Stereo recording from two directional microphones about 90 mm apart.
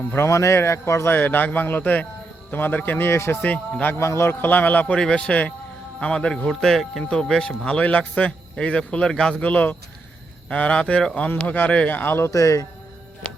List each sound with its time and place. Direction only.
0.2 s a man's voice: 35° left (ahead or behind)
1.1 s a man's voice: 20° left (ahead or behind)
3.4 s speech: 15° left (ahead or behind)
3.9 s a man's voice: 30° left (ahead or behind)
12.3 s a man's voice: 40° left (ahead or behind)